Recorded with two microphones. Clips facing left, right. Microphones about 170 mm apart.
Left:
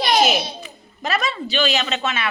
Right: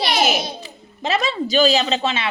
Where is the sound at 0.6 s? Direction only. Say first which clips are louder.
Right 2 dB; 25° right (ahead or behind).